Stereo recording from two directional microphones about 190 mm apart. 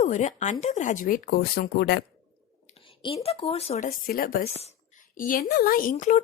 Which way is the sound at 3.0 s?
30° left (ahead or behind).